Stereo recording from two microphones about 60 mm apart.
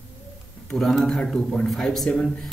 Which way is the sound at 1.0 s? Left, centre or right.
Centre.